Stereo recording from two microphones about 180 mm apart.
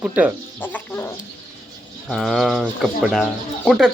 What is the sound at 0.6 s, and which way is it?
Music, 10° left (ahead or behind).